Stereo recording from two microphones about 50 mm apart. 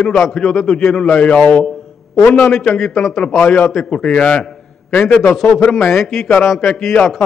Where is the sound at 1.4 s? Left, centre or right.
Left.